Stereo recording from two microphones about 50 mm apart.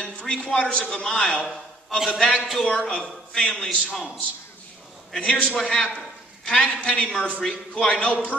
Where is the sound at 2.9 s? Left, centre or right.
Centre.